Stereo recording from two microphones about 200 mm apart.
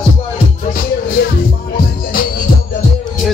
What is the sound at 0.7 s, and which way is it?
Music, 50° left (ahead or behind).